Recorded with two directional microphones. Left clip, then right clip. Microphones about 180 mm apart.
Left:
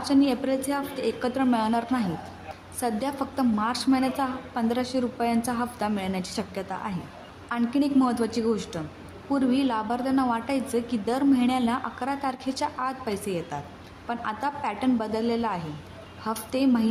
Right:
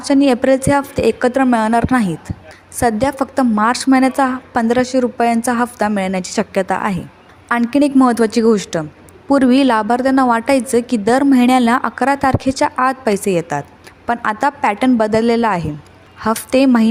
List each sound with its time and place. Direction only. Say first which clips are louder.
0.0 s a woman's voice: right 11 dB; 45° right (ahead or behind)